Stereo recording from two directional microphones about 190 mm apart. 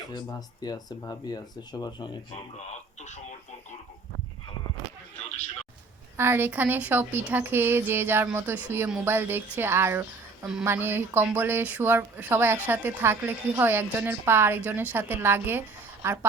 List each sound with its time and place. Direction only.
0.1 s speech: 20° left (ahead or behind)
2.3 s speech: 40° left (ahead or behind)
6.1 s speech: 10° right (ahead or behind)